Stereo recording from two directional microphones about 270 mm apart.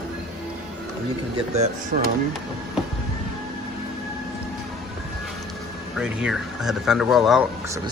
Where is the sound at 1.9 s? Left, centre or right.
Right.